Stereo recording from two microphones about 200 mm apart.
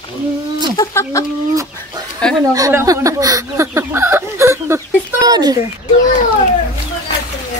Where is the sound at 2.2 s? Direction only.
5° left (ahead or behind).